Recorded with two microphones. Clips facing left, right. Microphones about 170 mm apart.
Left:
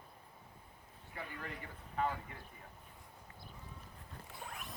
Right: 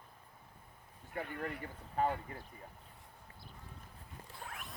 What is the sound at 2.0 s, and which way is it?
Speech, 40° right (ahead or behind).